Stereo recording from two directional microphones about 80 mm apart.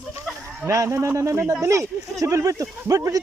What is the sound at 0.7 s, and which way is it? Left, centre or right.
Speech, right.